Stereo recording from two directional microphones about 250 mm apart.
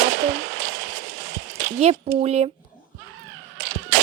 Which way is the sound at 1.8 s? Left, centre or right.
Right.